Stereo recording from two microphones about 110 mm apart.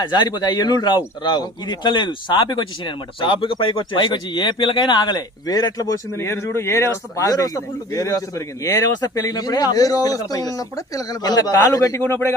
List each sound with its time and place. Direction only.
0.0 s a man's voice: 40° left (ahead or behind); by 12.3 s 20° left (ahead or behind)